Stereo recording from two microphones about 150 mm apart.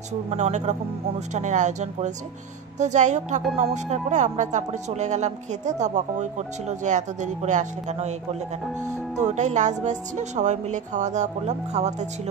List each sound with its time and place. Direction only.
0.3 s speech: 50° right (ahead or behind)